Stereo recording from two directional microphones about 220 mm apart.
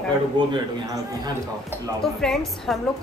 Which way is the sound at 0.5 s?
20° right (ahead or behind).